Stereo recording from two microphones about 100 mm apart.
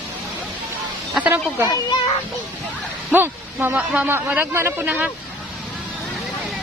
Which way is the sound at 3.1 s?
20° right (ahead or behind).